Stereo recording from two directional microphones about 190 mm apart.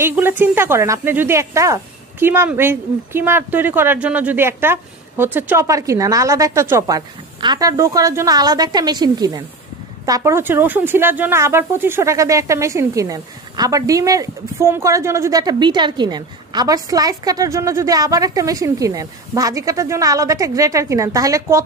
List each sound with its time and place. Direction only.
0.0 s speech: 10° right (ahead or behind)